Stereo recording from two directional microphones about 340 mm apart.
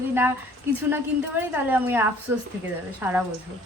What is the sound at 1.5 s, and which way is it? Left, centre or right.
Speech, centre.